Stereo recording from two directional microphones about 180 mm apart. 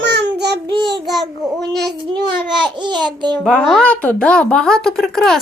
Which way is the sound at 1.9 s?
25° right (ahead or behind).